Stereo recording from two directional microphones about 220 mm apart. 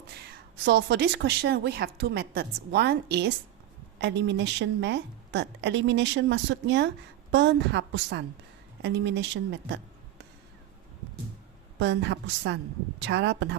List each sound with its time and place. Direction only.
0.1 s a woman's voice: 50° right (ahead or behind)
11.8 s a woman's voice: 55° right (ahead or behind)